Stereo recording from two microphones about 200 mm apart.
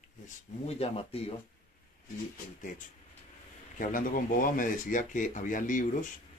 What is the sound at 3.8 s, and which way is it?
Speech, 45° left (ahead or behind).